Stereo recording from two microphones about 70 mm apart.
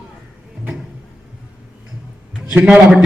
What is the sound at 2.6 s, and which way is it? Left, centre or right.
Speech, centre.